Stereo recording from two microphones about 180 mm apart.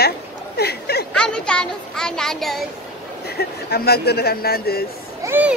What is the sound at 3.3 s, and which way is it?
Speech, 60° left (ahead or behind).